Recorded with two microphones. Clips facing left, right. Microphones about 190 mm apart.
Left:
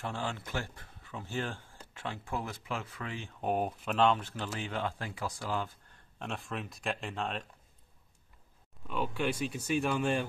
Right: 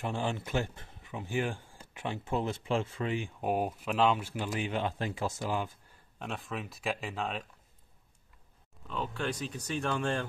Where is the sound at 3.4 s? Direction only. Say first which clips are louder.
Left 1 dB; 5° right (ahead or behind).